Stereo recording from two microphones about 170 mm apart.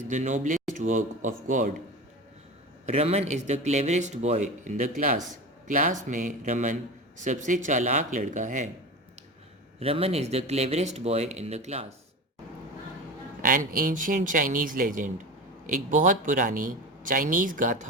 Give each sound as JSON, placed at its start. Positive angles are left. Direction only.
{"t": 0.1, "sound": "a man's voice", "side_deg": -45}
{"t": 2.8, "sound": "a man's voice", "side_deg": -40}
{"t": 9.8, "sound": "speech", "side_deg": -35}
{"t": 13.4, "sound": "a man's voice", "side_deg": -55}